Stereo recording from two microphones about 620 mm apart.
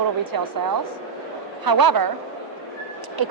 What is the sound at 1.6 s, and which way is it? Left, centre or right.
Speech, right.